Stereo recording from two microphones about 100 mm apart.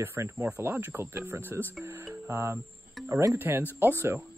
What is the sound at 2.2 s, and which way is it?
Cricket, 30° right (ahead or behind).